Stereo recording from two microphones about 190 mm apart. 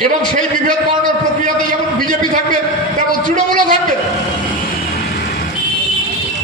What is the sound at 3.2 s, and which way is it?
Speech, 45° right (ahead or behind).